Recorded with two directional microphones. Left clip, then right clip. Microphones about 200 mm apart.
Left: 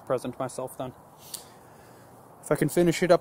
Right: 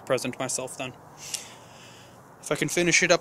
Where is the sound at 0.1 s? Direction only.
10° left (ahead or behind).